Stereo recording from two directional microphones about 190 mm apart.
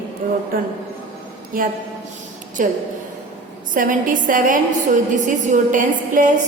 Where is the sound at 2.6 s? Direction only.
45° right (ahead or behind).